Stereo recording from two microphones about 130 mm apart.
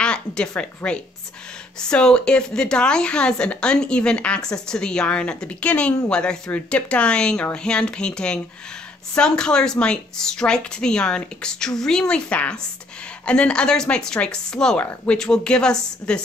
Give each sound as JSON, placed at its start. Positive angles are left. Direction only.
{"t": 0.0, "sound": "a woman's voice", "side_deg": 5}